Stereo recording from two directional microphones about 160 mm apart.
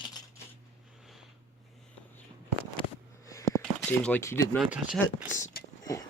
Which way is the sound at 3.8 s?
5° left (ahead or behind).